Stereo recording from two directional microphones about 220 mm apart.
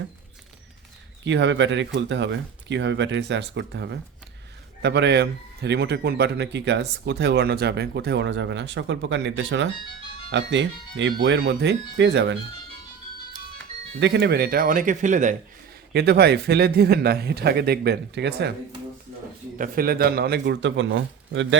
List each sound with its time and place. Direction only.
1.2 s a man's voice: 55° right (ahead or behind)
14.0 s speech: 50° right (ahead or behind); by 15.4 s 35° right (ahead or behind)
15.9 s a man's voice: 50° right (ahead or behind)
19.5 s a man's voice: 40° right (ahead or behind); by 21.6 s 60° right (ahead or behind)